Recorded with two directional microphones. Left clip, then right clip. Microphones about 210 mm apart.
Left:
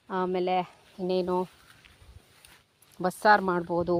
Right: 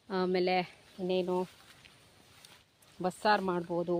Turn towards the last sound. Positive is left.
turn(degrees=45)  # may be behind; listen again after turning